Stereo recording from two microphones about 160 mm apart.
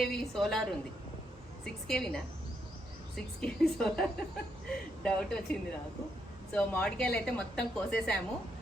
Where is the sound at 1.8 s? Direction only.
5° left (ahead or behind).